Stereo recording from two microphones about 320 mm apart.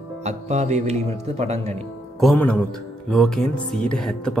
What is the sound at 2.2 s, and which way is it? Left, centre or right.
Speech, centre.